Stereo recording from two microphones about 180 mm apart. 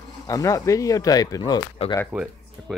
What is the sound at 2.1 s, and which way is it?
Speech, 5° right (ahead or behind).